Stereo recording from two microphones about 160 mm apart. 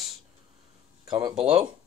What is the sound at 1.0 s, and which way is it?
Speech, 25° right (ahead or behind).